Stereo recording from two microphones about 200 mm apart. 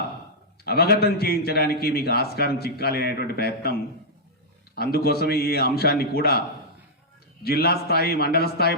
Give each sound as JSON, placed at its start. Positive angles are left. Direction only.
{"t": 0.6, "sound": "a man's voice", "side_deg": 50}
{"t": 7.4, "sound": "a man's voice", "side_deg": 50}